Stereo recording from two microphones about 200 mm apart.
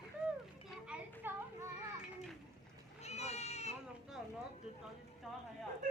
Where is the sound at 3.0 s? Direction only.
35° left (ahead or behind).